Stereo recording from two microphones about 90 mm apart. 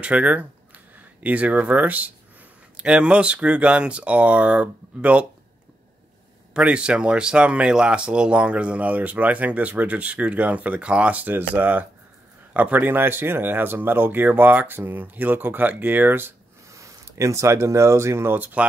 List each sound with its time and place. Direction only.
0.0 s speech: 15° right (ahead or behind)
6.5 s speech: 10° right (ahead or behind)
16.7 s speech: 35° right (ahead or behind); by 18.7 s 15° right (ahead or behind)